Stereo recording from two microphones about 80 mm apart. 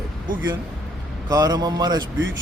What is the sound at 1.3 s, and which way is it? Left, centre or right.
Speech, right.